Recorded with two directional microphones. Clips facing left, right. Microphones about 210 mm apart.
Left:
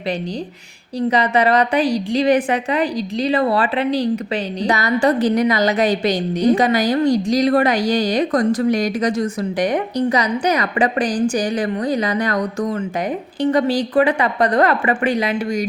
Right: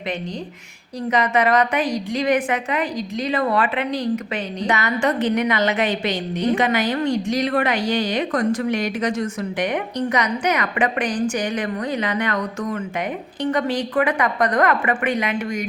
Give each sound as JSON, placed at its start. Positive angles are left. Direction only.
{"t": 0.9, "sound": "a woman's voice", "side_deg": 30}